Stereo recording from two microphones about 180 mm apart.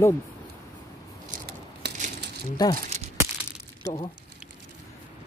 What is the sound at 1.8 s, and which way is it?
Crushing, 70° right (ahead or behind).